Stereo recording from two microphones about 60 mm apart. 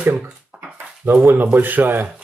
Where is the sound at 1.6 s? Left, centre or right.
Right.